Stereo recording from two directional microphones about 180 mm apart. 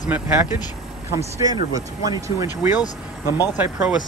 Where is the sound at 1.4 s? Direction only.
20° right (ahead or behind).